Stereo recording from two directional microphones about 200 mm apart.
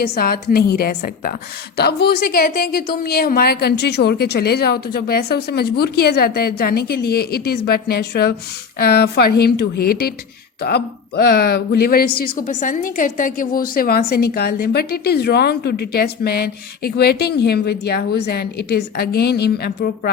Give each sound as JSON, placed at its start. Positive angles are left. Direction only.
{"t": 0.0, "sound": "speech", "side_deg": 50}